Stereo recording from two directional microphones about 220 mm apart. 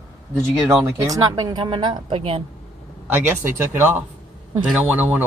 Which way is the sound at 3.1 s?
10° right (ahead or behind).